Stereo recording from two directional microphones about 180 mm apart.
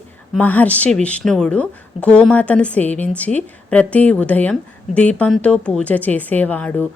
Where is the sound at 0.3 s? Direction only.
10° left (ahead or behind).